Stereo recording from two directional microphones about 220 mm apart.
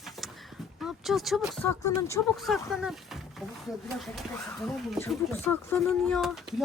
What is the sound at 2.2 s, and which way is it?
Speech, centre (ahead or behind).